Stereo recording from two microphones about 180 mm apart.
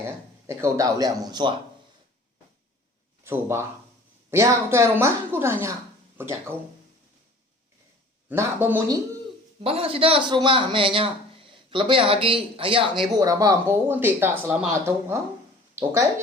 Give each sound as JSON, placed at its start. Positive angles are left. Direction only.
{"t": 0.4, "sound": "speech", "side_deg": -15}
{"t": 3.2, "sound": "speech", "side_deg": -15}
{"t": 8.3, "sound": "speech", "side_deg": -10}
{"t": 9.6, "sound": "speech", "side_deg": -30}